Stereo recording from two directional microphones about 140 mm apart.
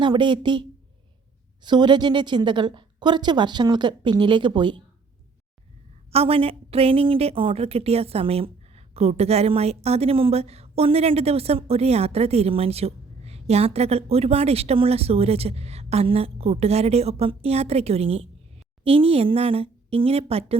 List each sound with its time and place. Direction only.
0.0 s a woman's voice: 35° right (ahead or behind)
1.6 s a woman's voice: 30° right (ahead or behind)
6.1 s a woman's voice: 45° right (ahead or behind)